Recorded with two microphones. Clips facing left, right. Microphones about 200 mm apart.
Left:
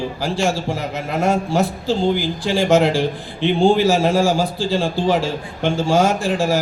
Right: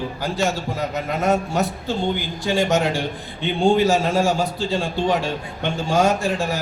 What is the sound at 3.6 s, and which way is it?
Speech, 30° left (ahead or behind).